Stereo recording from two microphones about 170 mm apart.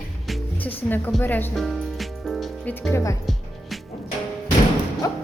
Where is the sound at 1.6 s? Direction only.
Centre (ahead or behind).